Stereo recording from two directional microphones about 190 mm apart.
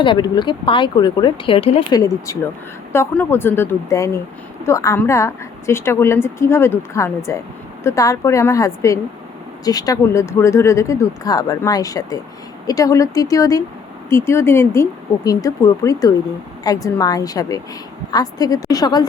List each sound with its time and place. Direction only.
0.0 s speech: 25° left (ahead or behind)
2.0 s a woman's voice: 15° left (ahead or behind)